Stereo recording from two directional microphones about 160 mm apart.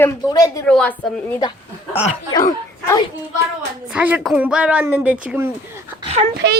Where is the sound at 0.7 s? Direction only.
5° left (ahead or behind).